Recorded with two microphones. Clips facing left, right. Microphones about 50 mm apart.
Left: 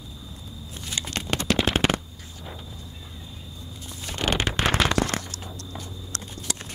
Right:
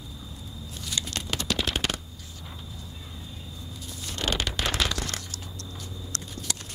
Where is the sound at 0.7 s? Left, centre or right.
Left.